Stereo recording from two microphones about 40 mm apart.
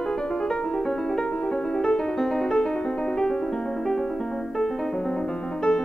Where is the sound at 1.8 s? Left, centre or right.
Left.